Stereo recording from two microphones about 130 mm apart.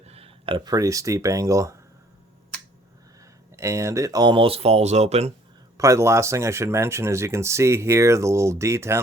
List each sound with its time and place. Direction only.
0.0 s a sound: 50° right (ahead or behind)
0.7 s speech: 25° right (ahead or behind)
3.5 s speech: 25° right (ahead or behind); by 5.3 s 55° right (ahead or behind)
5.7 s speech: 25° right (ahead or behind)